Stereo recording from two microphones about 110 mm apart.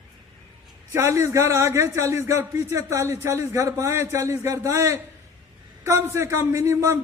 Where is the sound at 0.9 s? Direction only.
25° right (ahead or behind).